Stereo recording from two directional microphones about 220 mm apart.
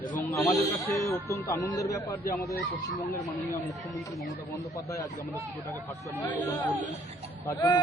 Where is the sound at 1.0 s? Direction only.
15° left (ahead or behind).